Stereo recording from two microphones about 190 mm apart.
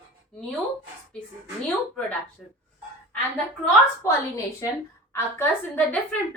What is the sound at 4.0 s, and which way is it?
A woman's voice, 15° left (ahead or behind).